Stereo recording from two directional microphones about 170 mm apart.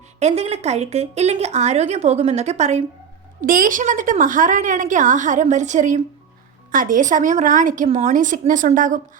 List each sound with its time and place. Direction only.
0.2 s a woman's voice: 40° right (ahead or behind)
3.4 s a woman's voice: 55° right (ahead or behind)